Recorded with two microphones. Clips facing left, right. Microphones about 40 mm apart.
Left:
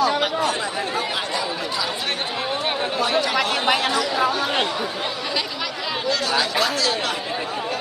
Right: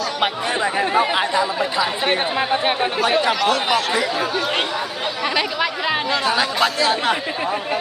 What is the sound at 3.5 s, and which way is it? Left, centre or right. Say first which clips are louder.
Speech: right 1 dB; centre.